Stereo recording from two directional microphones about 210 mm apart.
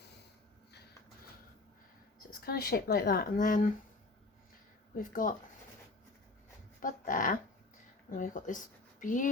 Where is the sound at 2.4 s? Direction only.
50° left (ahead or behind).